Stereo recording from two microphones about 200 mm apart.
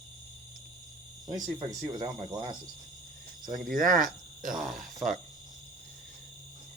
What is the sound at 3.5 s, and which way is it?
Speech, 45° right (ahead or behind).